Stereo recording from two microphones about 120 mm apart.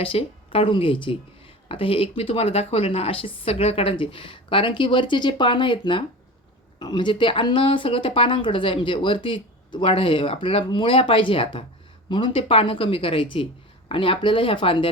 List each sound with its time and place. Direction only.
0.0 s speech: 50° left (ahead or behind)